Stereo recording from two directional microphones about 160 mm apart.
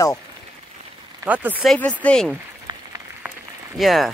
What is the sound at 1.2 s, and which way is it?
Speech, 10° right (ahead or behind).